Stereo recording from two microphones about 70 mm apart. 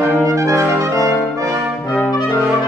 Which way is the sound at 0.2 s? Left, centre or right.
Right.